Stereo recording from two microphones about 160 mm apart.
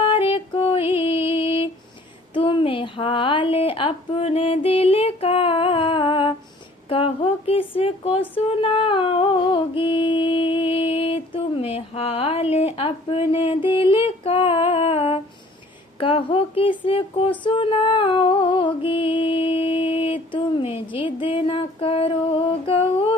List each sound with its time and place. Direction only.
0.0 s music: 35° left (ahead or behind)
2.3 s a sound: 30° left (ahead or behind)
16.0 s speech: 35° left (ahead or behind)
17.4 s music: 30° left (ahead or behind)